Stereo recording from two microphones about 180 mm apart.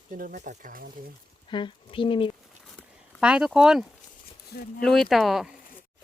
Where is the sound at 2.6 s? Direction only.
Centre (ahead or behind).